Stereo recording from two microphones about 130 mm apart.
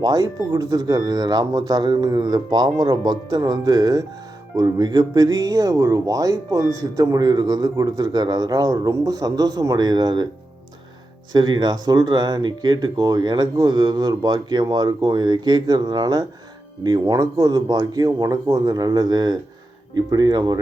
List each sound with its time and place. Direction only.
0.0 s speech: 30° right (ahead or behind)
11.3 s speech: 35° right (ahead or behind)